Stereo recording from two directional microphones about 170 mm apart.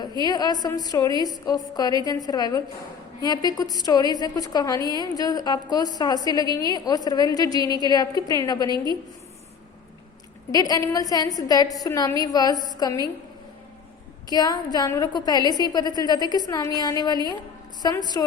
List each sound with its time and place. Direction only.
0.2 s a woman's voice: 25° left (ahead or behind)
10.5 s a woman's voice: 20° left (ahead or behind)
14.3 s a woman's voice: 25° left (ahead or behind)